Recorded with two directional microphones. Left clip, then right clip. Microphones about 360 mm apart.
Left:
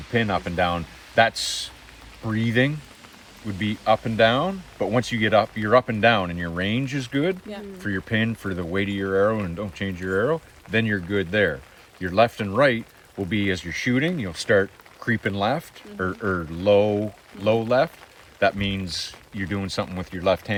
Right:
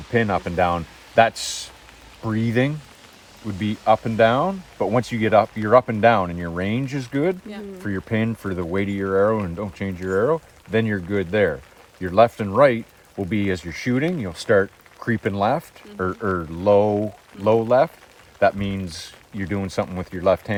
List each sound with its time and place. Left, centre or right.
0.1 s speech: centre